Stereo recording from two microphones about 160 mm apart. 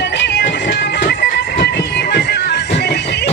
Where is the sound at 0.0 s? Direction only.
90° left.